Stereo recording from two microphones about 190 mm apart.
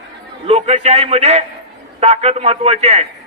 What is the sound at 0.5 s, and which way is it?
A man's voice, 30° right (ahead or behind).